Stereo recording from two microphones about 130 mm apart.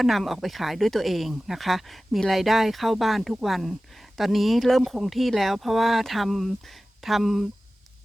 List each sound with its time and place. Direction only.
0.0 s speech: centre (ahead or behind)